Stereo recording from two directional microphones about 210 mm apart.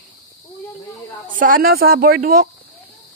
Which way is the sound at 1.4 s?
45° right (ahead or behind).